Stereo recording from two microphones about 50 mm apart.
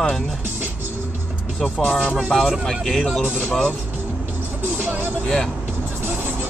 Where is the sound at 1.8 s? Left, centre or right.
Left.